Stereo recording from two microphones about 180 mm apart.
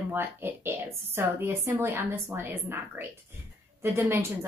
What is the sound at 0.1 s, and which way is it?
Speech, 10° right (ahead or behind).